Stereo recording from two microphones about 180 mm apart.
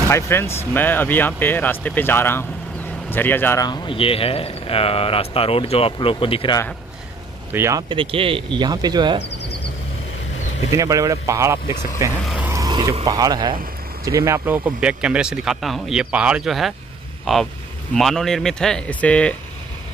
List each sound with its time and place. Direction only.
0.1 s a man's voice: 15° left (ahead or behind); by 6.6 s 30° left (ahead or behind)
7.5 s speech: 15° right (ahead or behind)
7.9 s speech: 30° right (ahead or behind)
9.2 s a sound: 70° left (ahead or behind)
10.7 s speech: 20° right (ahead or behind)
12.3 s vehicle: 10° right (ahead or behind)
12.6 s speech: 25° right (ahead or behind); by 19.3 s 5° left (ahead or behind)